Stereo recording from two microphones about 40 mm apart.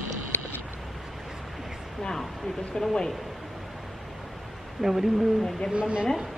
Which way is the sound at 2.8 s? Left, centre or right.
Left.